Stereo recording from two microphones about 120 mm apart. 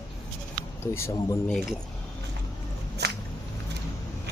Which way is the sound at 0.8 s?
20° left (ahead or behind).